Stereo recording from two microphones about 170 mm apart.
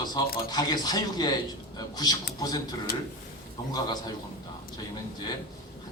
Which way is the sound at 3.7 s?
25° left (ahead or behind).